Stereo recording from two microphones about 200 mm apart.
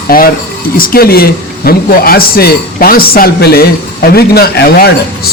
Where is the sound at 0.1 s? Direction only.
45° left (ahead or behind).